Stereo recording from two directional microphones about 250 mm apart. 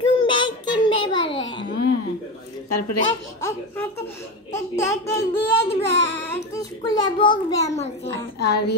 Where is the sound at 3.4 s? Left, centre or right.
Centre.